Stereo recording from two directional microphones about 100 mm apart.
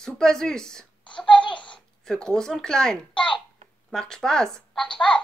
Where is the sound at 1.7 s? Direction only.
5° left (ahead or behind).